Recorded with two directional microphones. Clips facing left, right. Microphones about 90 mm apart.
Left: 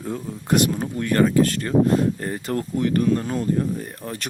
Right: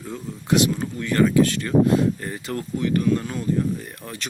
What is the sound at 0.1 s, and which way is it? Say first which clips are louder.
Speech: even; 50° left (ahead or behind).